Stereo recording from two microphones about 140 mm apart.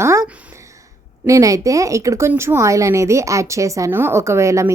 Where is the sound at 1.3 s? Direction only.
25° right (ahead or behind).